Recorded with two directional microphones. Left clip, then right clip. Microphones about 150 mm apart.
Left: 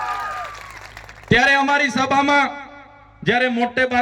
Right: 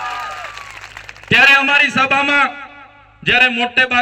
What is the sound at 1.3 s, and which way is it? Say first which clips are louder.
A man's voice: right 5 dB; 30° left (ahead or behind).